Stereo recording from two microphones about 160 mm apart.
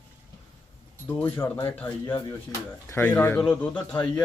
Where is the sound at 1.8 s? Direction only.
15° left (ahead or behind).